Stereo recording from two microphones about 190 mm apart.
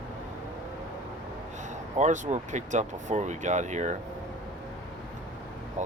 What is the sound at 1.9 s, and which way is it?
Speech, 40° right (ahead or behind).